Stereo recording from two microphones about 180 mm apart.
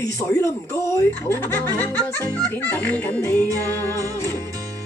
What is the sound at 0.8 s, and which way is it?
Speech, 15° left (ahead or behind).